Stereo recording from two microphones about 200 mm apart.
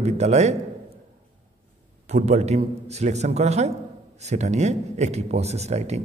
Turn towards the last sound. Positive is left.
turn(degrees=-35)  # may be behind; listen again after turning